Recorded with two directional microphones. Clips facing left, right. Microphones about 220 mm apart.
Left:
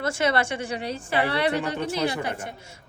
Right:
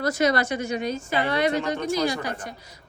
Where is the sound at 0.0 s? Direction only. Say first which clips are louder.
Right 2 dB; 30° left (ahead or behind).